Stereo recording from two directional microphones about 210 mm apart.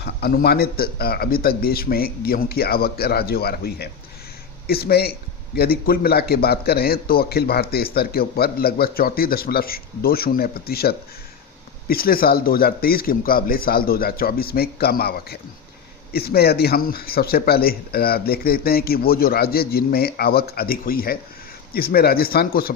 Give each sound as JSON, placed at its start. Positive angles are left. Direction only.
{"t": 0.0, "sound": "a man's voice", "side_deg": 50}